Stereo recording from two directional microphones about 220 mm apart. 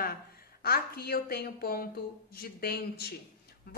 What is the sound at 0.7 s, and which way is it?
A woman's voice, 45° left (ahead or behind).